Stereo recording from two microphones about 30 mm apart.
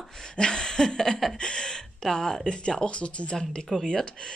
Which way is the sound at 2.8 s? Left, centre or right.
Left.